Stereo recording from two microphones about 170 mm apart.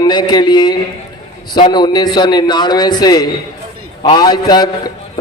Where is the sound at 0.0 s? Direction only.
25° left (ahead or behind).